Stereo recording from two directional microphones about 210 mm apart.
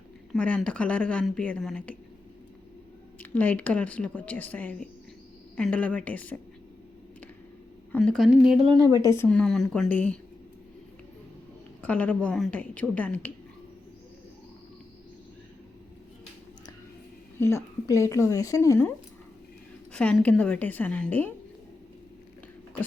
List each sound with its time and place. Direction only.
0.3 s speech: 5° left (ahead or behind)
3.2 s a woman's voice: 5° left (ahead or behind)
7.9 s speech: centre (ahead or behind)
8.5 s speech: 25° right (ahead or behind)
9.1 s speech: 5° left (ahead or behind)
11.8 s a woman's voice: 10° left (ahead or behind)
17.3 s a woman's voice: 10° left (ahead or behind)